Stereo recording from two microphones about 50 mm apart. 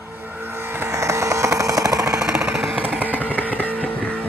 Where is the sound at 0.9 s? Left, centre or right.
Right.